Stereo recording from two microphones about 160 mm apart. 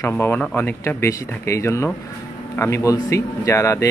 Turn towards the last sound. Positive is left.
turn(degrees=20)  # may be behind; listen again after turning